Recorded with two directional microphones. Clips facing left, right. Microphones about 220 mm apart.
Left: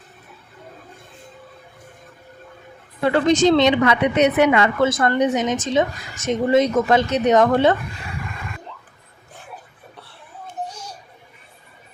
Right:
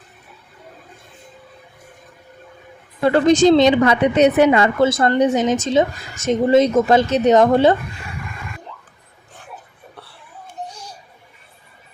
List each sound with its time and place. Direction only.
3.0 s a woman's voice: 40° right (ahead or behind)